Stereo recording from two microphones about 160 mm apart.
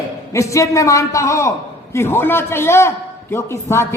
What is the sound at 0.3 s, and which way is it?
A man's voice, 20° left (ahead or behind).